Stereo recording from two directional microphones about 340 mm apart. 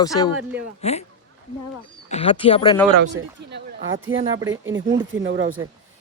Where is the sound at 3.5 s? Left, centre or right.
Right.